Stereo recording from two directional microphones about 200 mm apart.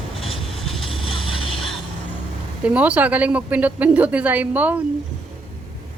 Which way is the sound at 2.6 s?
5° right (ahead or behind).